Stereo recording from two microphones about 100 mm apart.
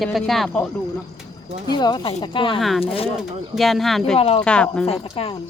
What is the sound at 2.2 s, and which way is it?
Speech, 55° left (ahead or behind).